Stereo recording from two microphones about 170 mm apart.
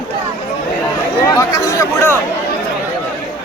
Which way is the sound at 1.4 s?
20° left (ahead or behind).